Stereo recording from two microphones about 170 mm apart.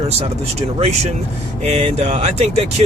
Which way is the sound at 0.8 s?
40° right (ahead or behind).